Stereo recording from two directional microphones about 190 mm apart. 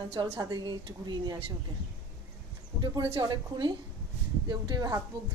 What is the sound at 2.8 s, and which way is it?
A woman's voice, 25° right (ahead or behind).